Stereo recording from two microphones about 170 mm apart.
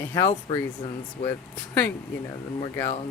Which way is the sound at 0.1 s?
20° left (ahead or behind).